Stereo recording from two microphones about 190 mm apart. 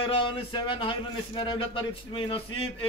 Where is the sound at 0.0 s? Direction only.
25° left (ahead or behind).